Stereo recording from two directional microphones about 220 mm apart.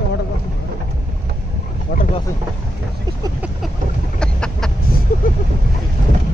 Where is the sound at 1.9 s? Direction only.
40° left (ahead or behind).